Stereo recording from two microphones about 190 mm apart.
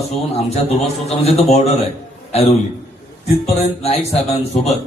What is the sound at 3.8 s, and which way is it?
Speech, 35° left (ahead or behind).